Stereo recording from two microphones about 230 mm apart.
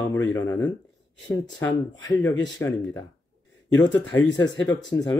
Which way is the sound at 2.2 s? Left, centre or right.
Centre.